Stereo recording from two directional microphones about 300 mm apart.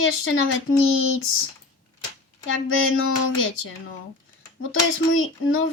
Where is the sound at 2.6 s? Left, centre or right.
Left.